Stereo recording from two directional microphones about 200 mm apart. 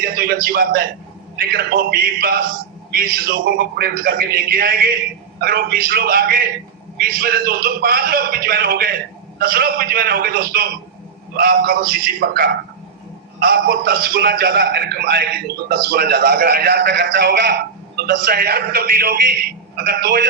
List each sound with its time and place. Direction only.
0.0 s a man's voice: 50° right (ahead or behind)